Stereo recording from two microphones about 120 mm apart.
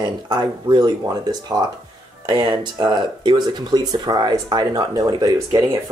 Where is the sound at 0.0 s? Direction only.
35° right (ahead or behind).